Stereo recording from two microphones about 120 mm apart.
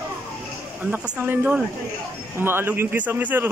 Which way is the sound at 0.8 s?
15° right (ahead or behind).